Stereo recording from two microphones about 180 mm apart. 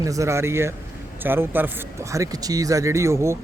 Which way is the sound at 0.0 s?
20° right (ahead or behind).